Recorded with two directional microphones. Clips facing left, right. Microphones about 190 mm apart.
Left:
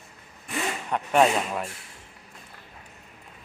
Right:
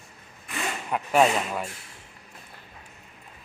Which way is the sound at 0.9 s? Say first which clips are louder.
Even; 5° right (ahead or behind).